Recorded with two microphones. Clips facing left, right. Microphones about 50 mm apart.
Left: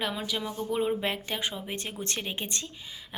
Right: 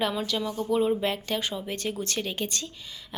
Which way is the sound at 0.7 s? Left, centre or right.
Left.